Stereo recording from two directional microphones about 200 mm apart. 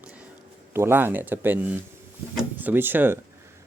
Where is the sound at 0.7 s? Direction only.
10° right (ahead or behind).